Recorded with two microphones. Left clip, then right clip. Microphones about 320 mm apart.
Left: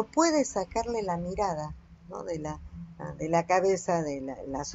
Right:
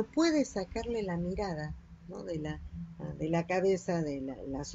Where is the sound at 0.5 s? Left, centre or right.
Left.